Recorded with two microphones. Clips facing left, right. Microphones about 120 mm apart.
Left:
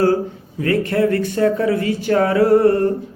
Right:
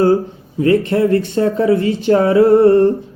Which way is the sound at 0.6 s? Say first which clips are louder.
Right 4 dB; 25° right (ahead or behind).